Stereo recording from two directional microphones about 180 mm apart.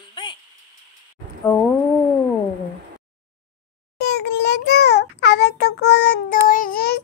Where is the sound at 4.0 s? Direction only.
70° left (ahead or behind).